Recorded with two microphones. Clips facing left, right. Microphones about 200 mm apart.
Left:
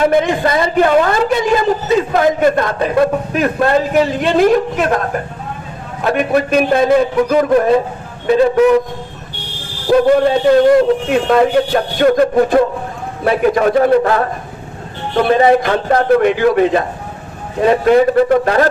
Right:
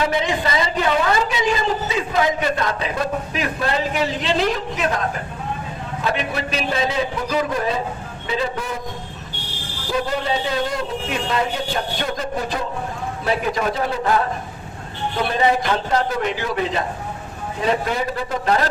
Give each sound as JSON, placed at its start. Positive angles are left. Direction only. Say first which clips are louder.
{"t": 0.0, "sound": "a man's voice", "louder": "left 8 dB", "side_deg": 50}
{"t": 9.9, "sound": "a man's voice", "louder": "left 12 dB", "side_deg": 55}